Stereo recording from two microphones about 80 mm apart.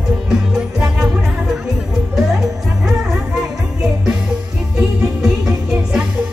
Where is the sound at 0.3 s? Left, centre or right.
Centre.